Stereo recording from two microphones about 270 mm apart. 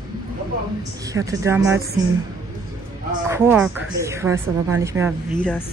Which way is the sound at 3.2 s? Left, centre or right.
Centre.